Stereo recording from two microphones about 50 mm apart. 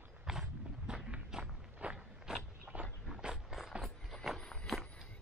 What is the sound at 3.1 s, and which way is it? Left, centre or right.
Walk, centre.